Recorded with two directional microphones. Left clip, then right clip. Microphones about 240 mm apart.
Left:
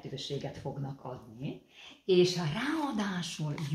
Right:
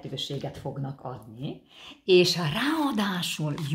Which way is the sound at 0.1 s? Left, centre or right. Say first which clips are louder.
Right 5 dB; right.